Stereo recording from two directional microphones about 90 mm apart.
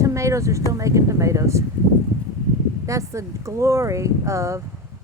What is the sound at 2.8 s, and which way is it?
Speech, 35° right (ahead or behind).